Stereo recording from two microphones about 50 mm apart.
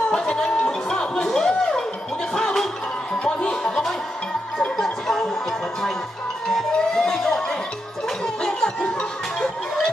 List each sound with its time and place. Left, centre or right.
0.1 s music: centre